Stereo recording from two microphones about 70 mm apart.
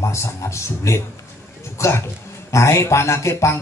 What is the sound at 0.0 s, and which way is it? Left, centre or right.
A man's voice, left.